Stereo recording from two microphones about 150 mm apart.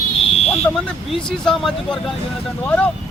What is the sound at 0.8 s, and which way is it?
Speech, 5° left (ahead or behind).